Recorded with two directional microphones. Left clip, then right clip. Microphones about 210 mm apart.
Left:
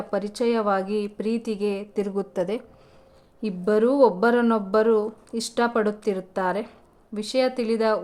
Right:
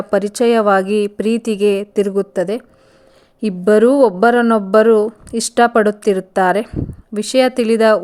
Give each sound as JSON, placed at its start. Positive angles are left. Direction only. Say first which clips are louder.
{"t": 0.1, "sound": "speech", "louder": "right 11 dB", "side_deg": -30}